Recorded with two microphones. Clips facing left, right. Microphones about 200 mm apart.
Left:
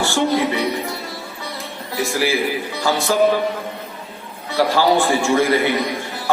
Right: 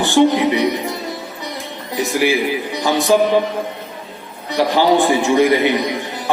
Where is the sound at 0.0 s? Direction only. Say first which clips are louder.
Right 5 dB; 20° right (ahead or behind).